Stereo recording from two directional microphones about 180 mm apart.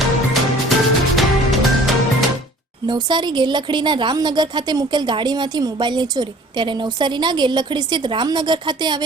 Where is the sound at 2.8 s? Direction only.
25° right (ahead or behind).